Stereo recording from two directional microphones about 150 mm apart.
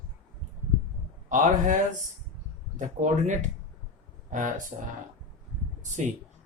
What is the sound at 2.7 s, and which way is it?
Speech, 55° right (ahead or behind).